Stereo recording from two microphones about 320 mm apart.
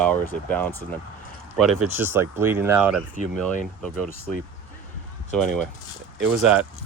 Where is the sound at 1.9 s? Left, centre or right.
Centre.